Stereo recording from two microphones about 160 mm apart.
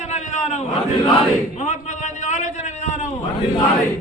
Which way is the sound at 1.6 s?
45° left (ahead or behind).